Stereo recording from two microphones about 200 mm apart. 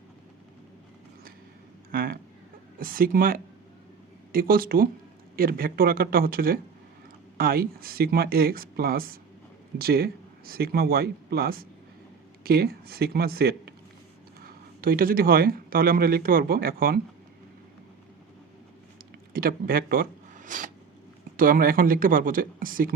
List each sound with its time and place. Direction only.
1.9 s speech: 50° right (ahead or behind)
19.3 s speech: 45° right (ahead or behind)